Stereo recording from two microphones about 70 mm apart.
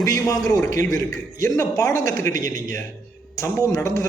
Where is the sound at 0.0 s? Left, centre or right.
Left.